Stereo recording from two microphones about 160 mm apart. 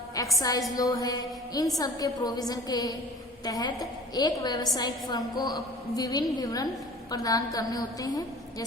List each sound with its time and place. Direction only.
0.3 s a woman's voice: 20° left (ahead or behind)